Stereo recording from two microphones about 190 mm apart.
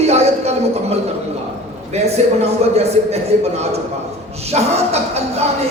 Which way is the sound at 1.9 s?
35° right (ahead or behind).